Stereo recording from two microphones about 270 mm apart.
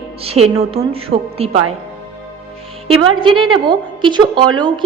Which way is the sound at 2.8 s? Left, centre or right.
Centre.